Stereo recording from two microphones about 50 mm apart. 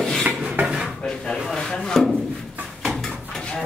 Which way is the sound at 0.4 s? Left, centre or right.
Right.